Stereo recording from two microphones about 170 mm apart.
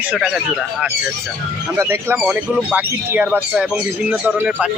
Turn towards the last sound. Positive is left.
turn(degrees=-10)  # may be behind; listen again after turning